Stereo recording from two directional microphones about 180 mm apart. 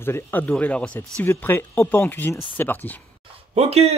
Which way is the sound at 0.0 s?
10° left (ahead or behind).